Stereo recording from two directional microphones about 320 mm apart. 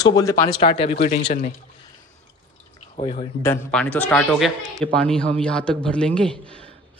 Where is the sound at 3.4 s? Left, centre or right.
Centre.